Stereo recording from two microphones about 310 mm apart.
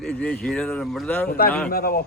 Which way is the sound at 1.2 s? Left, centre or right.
Left.